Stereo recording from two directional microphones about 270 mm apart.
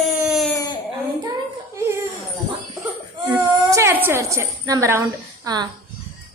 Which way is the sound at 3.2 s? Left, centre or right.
Centre.